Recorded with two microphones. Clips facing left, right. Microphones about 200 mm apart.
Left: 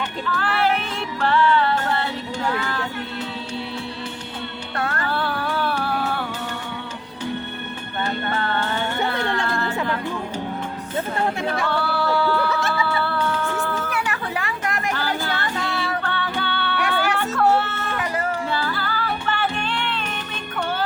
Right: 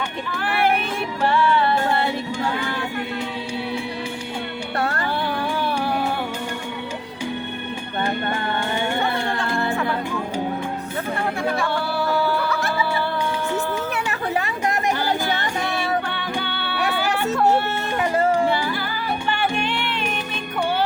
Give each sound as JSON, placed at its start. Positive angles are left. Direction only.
{"t": 0.3, "sound": "a sound", "side_deg": -15}
{"t": 1.2, "sound": "music", "side_deg": -15}
{"t": 4.8, "sound": "music", "side_deg": -30}
{"t": 5.0, "sound": "music", "side_deg": -15}
{"t": 8.0, "sound": "music", "side_deg": -15}
{"t": 11.6, "sound": "a sound", "side_deg": -15}
{"t": 13.1, "sound": "music", "side_deg": -15}
{"t": 17.9, "sound": "a sound", "side_deg": -25}
{"t": 18.5, "sound": "music", "side_deg": -15}